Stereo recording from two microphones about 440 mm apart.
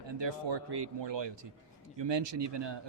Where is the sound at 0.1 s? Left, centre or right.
Right.